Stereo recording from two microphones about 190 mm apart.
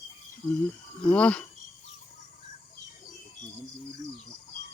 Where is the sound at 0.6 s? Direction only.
5° left (ahead or behind).